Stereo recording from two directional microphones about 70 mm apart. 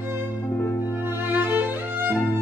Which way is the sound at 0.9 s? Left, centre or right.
Right.